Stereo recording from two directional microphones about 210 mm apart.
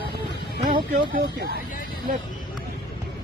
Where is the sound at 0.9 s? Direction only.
50° right (ahead or behind).